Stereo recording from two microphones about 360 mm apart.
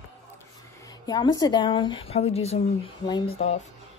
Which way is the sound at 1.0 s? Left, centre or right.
Centre.